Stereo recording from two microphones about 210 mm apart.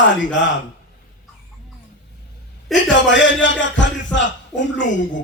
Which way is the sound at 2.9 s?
60° left (ahead or behind).